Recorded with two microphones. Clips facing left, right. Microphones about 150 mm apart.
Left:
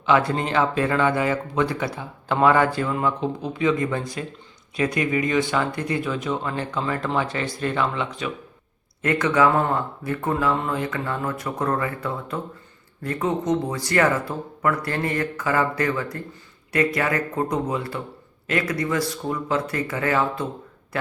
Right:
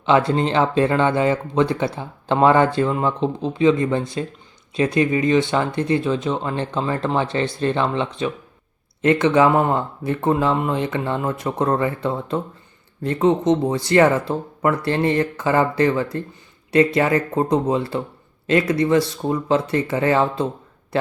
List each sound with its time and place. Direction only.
0.0 s speech: 25° right (ahead or behind)